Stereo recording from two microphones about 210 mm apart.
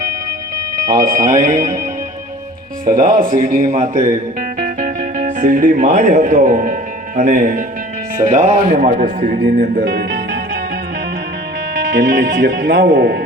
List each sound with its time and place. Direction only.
0.9 s a man's voice: 40° right (ahead or behind)
2.8 s a man's voice: 40° right (ahead or behind)
9.6 s music: 45° right (ahead or behind)
11.7 s speech: 55° right (ahead or behind)